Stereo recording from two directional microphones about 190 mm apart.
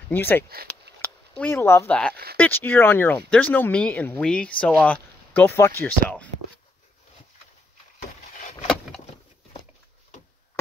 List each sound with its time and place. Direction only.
0.1 s speech: 10° left (ahead or behind)
8.4 s vehicle: 40° left (ahead or behind)